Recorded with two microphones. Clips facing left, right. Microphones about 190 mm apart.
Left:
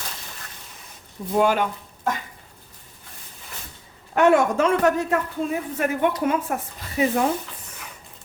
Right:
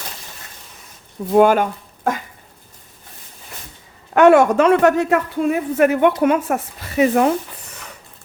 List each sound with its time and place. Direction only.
1.4 s speech: 50° right (ahead or behind)
4.1 s a woman's voice: 75° right (ahead or behind)